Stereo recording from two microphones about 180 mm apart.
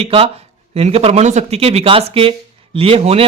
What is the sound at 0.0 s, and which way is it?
Speech, 35° right (ahead or behind).